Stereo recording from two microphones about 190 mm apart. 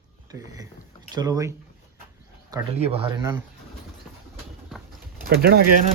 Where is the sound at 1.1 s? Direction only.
20° right (ahead or behind).